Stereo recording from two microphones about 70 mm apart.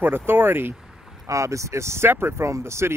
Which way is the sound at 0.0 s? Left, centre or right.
Right.